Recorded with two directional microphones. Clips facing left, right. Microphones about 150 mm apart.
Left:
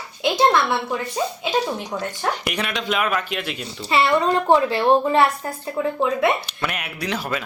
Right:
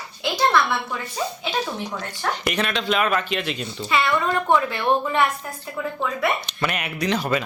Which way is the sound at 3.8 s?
35° left (ahead or behind).